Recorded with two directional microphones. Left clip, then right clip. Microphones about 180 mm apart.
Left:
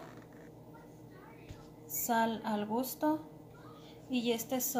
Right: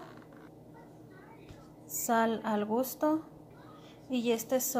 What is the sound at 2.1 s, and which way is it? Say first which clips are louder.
A woman's voice: right 3 dB; 30° right (ahead or behind).